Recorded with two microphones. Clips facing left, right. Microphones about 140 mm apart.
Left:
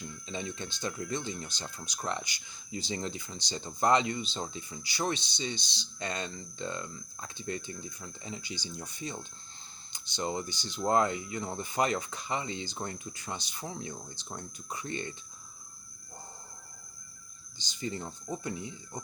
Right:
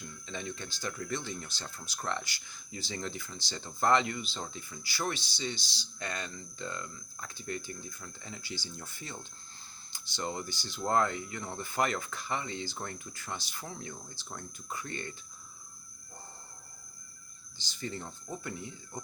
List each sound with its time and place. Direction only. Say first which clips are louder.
0.0 s speech: left 2 dB; 20° left (ahead or behind)
17.6 s speech: left 3 dB; 15° left (ahead or behind)